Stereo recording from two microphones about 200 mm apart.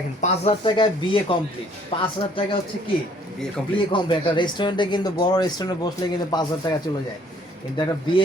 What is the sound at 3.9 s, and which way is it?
Speech, 25° left (ahead or behind).